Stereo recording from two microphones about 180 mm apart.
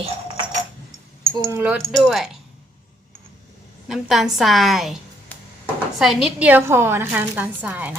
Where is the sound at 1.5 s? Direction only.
10° right (ahead or behind).